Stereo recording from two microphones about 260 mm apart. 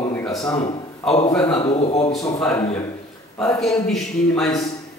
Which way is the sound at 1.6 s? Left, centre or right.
Left.